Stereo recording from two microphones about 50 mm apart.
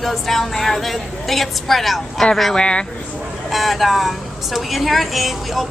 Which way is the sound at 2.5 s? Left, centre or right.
Centre.